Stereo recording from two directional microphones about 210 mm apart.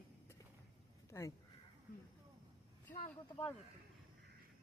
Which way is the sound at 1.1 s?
10° left (ahead or behind).